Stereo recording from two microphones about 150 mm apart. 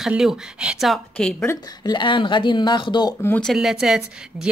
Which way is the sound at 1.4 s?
25° left (ahead or behind).